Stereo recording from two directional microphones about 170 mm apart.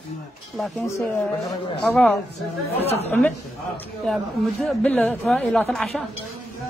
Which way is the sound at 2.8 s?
35° left (ahead or behind).